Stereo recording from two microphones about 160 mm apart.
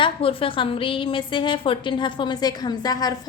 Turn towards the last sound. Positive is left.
turn(degrees=25)  # may be behind; listen again after turning